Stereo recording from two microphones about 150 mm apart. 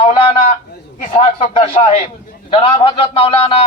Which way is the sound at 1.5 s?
40° left (ahead or behind).